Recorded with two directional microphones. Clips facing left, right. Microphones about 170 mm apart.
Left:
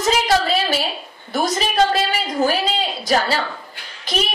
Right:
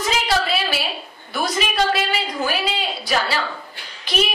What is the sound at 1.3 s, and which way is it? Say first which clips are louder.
A woman's voice: left 3 dB; 45° left (ahead or behind).